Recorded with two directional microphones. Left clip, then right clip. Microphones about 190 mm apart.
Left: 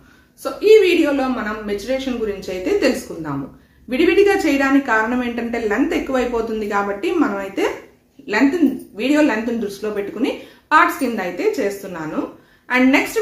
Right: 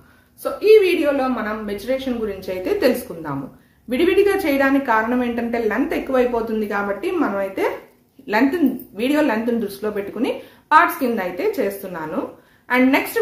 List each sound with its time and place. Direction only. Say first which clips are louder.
0.4 s a woman's voice: left 1 dB; 10° right (ahead or behind)
3.9 s a woman's voice: left 2 dB; 25° right (ahead or behind)
8.9 s a woman's voice: left 2 dB; 25° right (ahead or behind)